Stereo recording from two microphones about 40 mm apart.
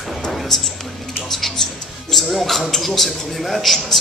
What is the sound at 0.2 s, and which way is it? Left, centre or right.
Music, centre.